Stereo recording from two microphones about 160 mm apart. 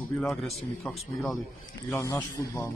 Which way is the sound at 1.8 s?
20° left (ahead or behind).